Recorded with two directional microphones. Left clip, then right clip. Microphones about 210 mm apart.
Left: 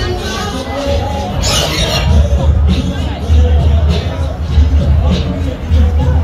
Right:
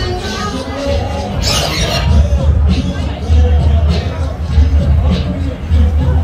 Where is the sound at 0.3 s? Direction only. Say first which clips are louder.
Left 1 dB; 5° left (ahead or behind).